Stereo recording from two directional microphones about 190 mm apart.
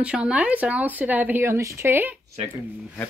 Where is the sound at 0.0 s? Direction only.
5° right (ahead or behind).